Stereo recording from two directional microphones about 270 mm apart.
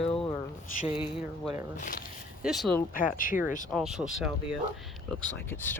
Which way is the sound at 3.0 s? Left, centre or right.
Left.